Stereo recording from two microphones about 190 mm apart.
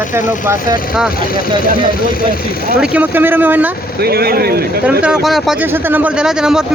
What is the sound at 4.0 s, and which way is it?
Speech, 55° right (ahead or behind).